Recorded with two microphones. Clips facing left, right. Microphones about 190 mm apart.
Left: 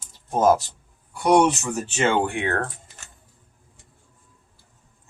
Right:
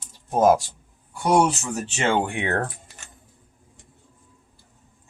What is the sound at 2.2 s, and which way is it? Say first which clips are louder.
Speech: left 1 dB; 20° right (ahead or behind).